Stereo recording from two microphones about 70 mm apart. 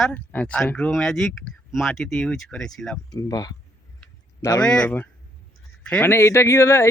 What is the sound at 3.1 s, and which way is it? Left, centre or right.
Speech, left.